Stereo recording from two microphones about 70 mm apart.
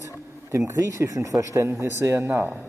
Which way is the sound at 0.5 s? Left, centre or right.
Right.